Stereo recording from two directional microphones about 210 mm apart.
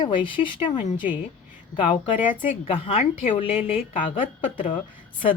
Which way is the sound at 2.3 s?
40° left (ahead or behind).